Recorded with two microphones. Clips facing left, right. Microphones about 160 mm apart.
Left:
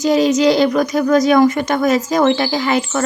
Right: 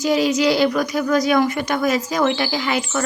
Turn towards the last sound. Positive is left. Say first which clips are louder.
# left 5 dB
turn(degrees=45)  # may be behind; listen again after turning